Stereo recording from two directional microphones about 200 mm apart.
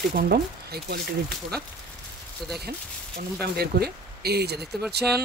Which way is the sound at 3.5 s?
50° right (ahead or behind).